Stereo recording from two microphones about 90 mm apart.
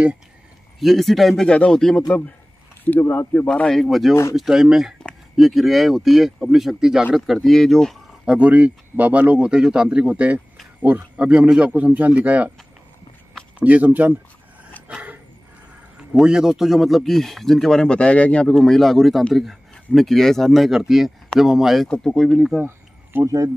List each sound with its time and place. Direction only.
0.7 s a man's voice: centre (ahead or behind)
2.8 s speech: 25° left (ahead or behind)
3.3 s a man's voice: 10° left (ahead or behind)
4.1 s speech: 30° left (ahead or behind)
4.4 s a man's voice: 5° right (ahead or behind)
8.3 s a man's voice: 15° right (ahead or behind)
13.6 s a man's voice: 15° right (ahead or behind)
14.9 s a sound: 15° right (ahead or behind)
16.0 s a man's voice: 5° right (ahead or behind)
21.8 s a man's voice: 10° left (ahead or behind)
22.6 s a sound: 25° right (ahead or behind)
23.2 s speech: 40° right (ahead or behind)